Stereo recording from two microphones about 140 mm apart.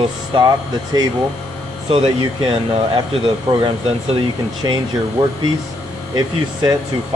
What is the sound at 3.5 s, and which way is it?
Speech, 30° right (ahead or behind).